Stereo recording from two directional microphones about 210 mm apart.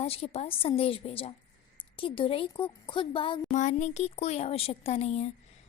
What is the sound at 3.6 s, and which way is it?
A woman's voice, 35° left (ahead or behind).